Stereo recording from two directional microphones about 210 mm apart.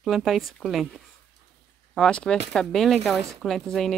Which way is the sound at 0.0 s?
Centre (ahead or behind).